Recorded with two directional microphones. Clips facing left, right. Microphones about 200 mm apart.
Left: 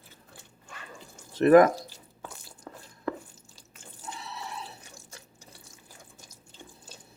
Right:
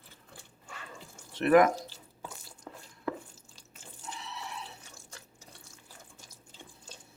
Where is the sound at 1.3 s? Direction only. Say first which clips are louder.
Left 5 dB; 40° left (ahead or behind).